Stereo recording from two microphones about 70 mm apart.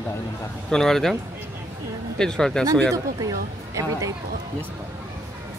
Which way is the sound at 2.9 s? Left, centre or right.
Right.